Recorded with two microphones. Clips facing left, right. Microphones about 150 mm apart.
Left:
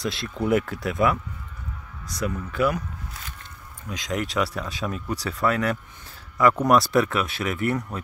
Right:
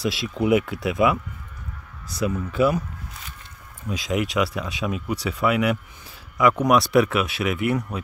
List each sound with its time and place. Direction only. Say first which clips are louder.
0.0 s speech: right 3 dB; 5° right (ahead or behind)
2.0 s speech: right 3 dB; 25° right (ahead or behind)
3.9 s speech: right 3 dB; 10° right (ahead or behind)